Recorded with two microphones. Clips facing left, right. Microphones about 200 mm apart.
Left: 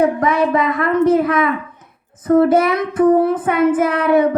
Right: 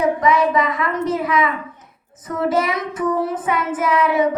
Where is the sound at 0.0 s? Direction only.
55° left (ahead or behind).